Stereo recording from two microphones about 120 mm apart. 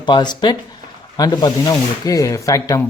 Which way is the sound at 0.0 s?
40° left (ahead or behind).